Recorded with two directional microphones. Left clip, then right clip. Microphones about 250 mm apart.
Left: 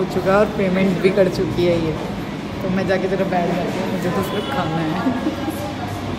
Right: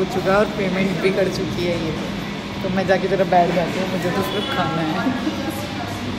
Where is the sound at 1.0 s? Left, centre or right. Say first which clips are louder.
Left 4 dB; centre.